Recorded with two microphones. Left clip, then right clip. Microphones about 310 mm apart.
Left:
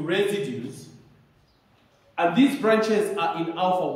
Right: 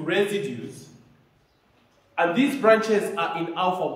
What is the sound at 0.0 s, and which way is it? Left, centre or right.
Speech, centre.